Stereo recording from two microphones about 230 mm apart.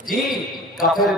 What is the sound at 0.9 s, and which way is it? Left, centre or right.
Speech, centre.